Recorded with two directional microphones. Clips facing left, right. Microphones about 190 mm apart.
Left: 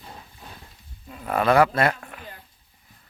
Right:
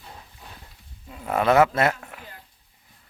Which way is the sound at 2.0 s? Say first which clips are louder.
Left 1 dB; 15° right (ahead or behind).